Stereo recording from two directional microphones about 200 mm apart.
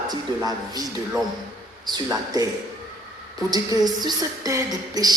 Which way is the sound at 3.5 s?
20° right (ahead or behind).